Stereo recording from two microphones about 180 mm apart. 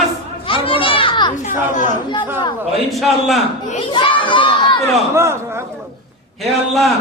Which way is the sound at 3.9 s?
30° left (ahead or behind).